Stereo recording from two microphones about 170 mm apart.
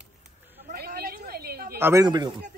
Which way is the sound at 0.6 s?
60° right (ahead or behind).